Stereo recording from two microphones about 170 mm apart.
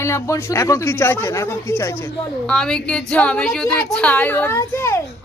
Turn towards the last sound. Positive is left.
turn(degrees=15)  # may be behind; listen again after turning